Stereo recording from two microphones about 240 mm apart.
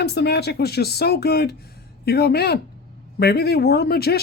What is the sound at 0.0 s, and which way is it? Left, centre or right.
Speech, left.